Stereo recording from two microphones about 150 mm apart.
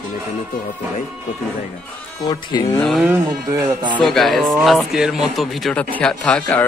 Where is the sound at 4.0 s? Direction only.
Centre (ahead or behind).